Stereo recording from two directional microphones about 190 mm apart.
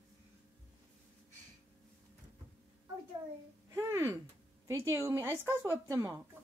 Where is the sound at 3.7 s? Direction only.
15° right (ahead or behind).